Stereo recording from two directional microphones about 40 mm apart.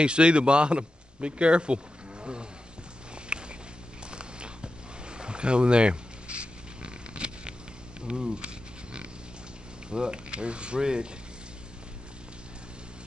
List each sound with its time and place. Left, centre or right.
0.0 s a man's voice: right
3.3 s a sound: right
8.1 s pig: right
9.8 s speech: right